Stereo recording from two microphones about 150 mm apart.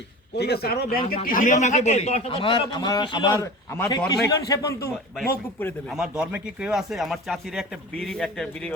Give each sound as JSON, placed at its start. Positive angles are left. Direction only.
{"t": 0.3, "sound": "a man's voice", "side_deg": 90}
{"t": 1.1, "sound": "a man's voice", "side_deg": 65}
{"t": 3.3, "sound": "speech", "side_deg": 20}
{"t": 5.9, "sound": "speech", "side_deg": -5}